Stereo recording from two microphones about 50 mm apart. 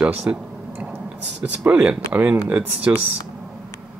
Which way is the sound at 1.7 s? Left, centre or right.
Right.